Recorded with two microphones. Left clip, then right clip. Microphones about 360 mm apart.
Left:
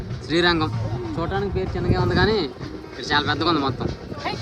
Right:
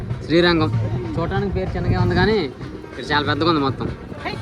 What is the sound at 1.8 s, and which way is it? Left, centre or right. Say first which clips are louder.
Speech: left 3 dB; centre.